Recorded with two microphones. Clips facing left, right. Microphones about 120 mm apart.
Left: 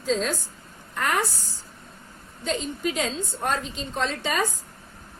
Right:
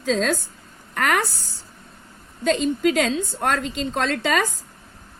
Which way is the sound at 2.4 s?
90° right.